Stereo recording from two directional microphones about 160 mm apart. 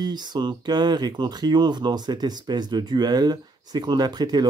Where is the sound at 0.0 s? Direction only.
25° right (ahead or behind).